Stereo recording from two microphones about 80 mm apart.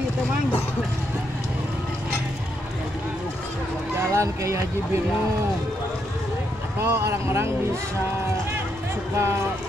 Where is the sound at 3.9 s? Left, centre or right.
Right.